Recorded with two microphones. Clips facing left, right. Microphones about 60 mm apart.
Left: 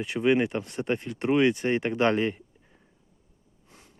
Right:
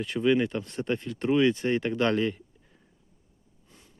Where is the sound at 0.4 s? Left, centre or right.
Left.